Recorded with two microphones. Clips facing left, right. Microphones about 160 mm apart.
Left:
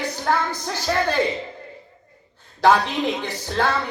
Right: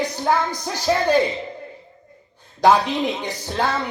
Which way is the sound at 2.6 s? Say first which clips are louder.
Right 1 dB; 15° right (ahead or behind).